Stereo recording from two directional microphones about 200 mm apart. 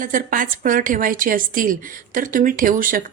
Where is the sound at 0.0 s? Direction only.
45° right (ahead or behind).